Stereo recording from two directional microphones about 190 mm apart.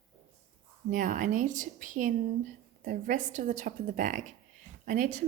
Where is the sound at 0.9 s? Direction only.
45° right (ahead or behind).